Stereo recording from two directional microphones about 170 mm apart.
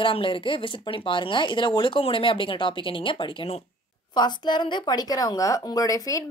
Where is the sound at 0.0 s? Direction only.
30° left (ahead or behind).